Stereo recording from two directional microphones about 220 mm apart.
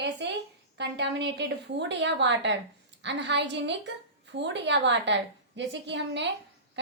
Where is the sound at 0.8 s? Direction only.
50° right (ahead or behind).